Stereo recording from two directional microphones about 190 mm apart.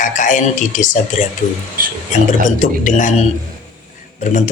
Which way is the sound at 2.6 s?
40° left (ahead or behind).